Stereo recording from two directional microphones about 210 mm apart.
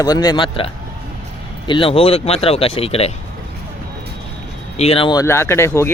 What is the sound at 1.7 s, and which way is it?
Speech, 25° left (ahead or behind).